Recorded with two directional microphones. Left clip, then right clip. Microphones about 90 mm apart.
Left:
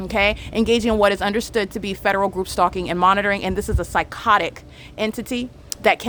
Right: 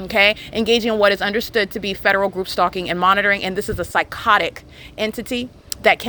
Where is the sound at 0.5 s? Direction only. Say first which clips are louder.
Right 1 dB; 30° left (ahead or behind).